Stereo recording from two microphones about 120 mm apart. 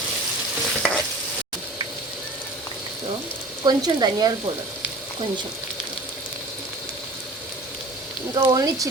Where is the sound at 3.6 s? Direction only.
35° right (ahead or behind).